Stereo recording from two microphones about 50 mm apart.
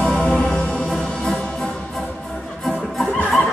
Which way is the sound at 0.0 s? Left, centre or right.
Centre.